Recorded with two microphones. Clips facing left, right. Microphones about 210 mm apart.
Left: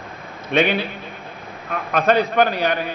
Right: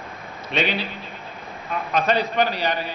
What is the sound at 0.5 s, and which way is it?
A man's voice, 55° left (ahead or behind).